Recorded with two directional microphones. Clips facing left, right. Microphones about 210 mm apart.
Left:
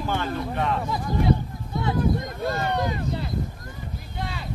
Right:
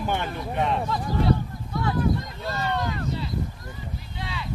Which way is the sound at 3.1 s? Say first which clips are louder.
Left 1 dB; 55° left (ahead or behind).